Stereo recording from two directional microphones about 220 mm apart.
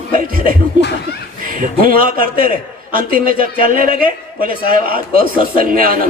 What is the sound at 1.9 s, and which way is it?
A man's voice, 40° right (ahead or behind).